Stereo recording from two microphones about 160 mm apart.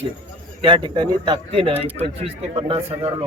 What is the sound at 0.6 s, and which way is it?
Speech, 30° right (ahead or behind).